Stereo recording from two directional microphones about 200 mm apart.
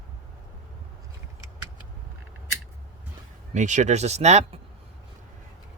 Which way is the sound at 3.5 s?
35° right (ahead or behind).